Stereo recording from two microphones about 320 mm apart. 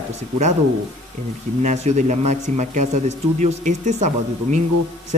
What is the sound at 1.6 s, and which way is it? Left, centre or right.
Speech, right.